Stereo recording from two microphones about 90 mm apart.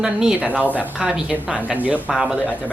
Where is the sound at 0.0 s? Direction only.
10° right (ahead or behind).